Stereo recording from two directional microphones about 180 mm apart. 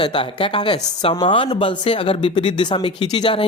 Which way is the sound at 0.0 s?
25° left (ahead or behind).